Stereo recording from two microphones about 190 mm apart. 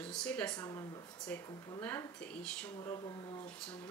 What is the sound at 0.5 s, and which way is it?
Speech, 20° left (ahead or behind).